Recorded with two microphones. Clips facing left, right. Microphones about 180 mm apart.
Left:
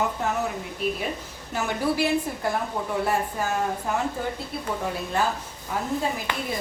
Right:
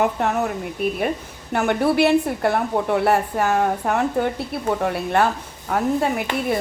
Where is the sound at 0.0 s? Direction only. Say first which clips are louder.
Right 6 dB; 65° right (ahead or behind).